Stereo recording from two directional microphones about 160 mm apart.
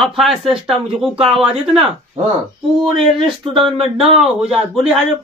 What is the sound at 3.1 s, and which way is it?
Speech, centre (ahead or behind).